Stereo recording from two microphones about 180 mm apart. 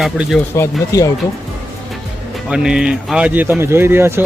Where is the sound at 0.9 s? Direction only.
15° left (ahead or behind).